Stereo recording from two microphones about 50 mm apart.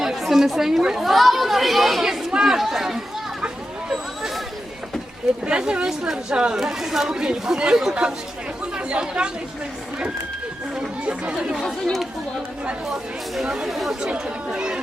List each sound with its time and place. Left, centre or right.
0.0 s a woman's voice: centre
5.5 s speech: centre
11.0 s speech: right
11.6 s a woman's voice: centre
13.4 s speech: centre
13.7 s a woman's voice: centre
14.5 s speech: centre